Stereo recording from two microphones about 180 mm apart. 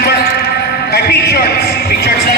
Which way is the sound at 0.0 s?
60° left (ahead or behind).